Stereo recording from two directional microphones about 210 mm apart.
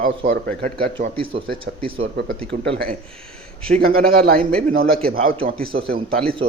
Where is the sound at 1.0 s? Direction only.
25° right (ahead or behind).